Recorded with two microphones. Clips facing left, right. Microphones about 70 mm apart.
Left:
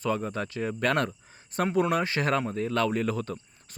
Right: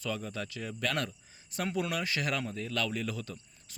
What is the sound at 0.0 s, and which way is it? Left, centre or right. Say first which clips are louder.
Speech: left 7 dB; left.